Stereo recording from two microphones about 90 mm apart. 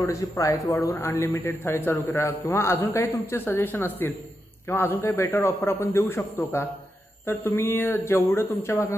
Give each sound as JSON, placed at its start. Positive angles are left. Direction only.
{"t": 0.0, "sound": "a man's voice", "side_deg": 35}